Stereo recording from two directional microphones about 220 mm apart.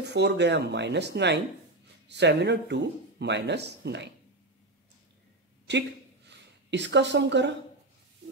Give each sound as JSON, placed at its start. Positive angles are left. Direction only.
{"t": 0.0, "sound": "speech", "side_deg": -50}
{"t": 5.7, "sound": "a woman's voice", "side_deg": -50}